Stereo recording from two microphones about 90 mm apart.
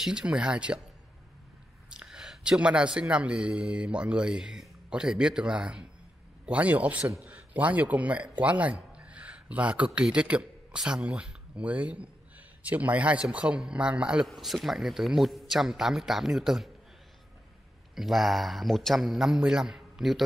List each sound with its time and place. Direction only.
0.0 s speech: 10° right (ahead or behind)
1.9 s a man's voice: 10° right (ahead or behind)
14.2 s a man's voice: centre (ahead or behind)
17.9 s a man's voice: centre (ahead or behind)